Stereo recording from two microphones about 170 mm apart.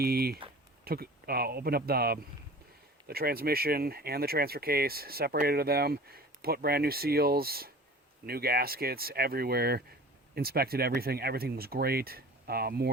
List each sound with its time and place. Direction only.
0.0 s speech: 65° right (ahead or behind)